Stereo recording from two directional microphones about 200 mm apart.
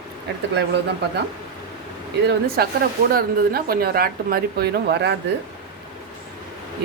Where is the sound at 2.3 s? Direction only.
50° right (ahead or behind).